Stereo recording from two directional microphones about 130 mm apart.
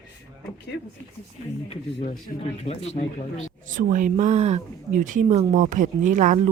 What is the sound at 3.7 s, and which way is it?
Speech, 90° right.